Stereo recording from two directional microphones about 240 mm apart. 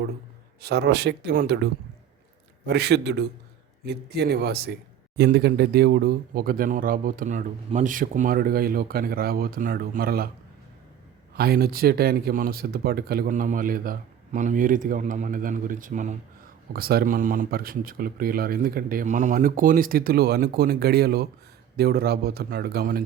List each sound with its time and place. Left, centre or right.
0.6 s a man's voice: right
11.3 s a man's voice: right